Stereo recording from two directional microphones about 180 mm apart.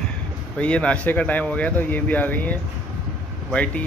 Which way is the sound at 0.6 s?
5° left (ahead or behind).